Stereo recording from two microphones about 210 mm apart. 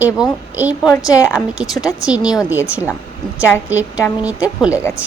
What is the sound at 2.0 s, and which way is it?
Speech, 5° right (ahead or behind).